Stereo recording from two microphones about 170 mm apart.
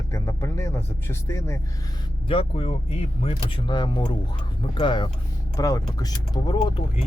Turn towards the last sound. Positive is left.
turn(degrees=30)  # may be behind; listen again after turning